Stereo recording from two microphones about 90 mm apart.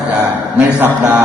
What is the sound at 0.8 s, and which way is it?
Speech, 15° right (ahead or behind).